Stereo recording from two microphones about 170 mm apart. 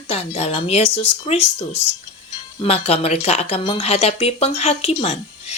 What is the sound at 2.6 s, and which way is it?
A woman's voice, 35° left (ahead or behind).